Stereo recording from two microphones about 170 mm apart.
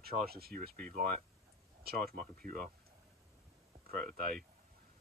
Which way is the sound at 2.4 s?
55° right (ahead or behind).